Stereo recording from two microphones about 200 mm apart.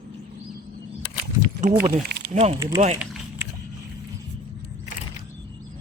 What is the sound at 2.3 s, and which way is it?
Speech, 30° right (ahead or behind).